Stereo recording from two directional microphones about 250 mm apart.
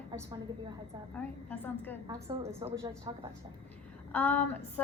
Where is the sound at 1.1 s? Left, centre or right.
Centre.